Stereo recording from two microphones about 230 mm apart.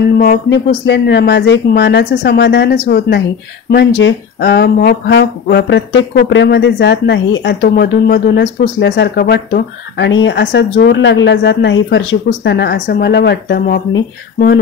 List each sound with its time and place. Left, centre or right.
0.2 s speech: left